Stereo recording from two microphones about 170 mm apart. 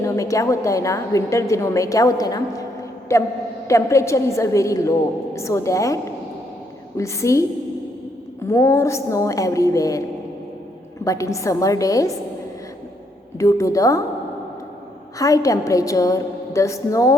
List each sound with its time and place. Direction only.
0.0 s a woman's voice: 20° left (ahead or behind)
8.4 s a woman's voice: 15° left (ahead or behind)
11.0 s a woman's voice: 20° left (ahead or behind)
13.4 s a woman's voice: 20° left (ahead or behind)
15.2 s a woman's voice: 20° left (ahead or behind)